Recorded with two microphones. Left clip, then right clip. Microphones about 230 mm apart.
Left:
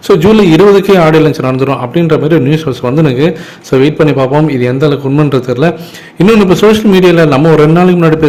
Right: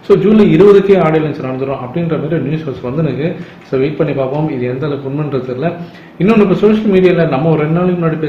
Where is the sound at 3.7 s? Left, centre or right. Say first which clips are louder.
Left 6 dB; left.